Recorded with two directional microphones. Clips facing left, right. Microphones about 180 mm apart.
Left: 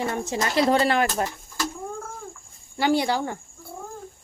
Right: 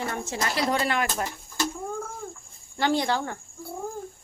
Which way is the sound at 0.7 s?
30° left (ahead or behind).